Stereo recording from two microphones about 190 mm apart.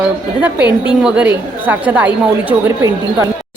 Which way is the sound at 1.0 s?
5° right (ahead or behind).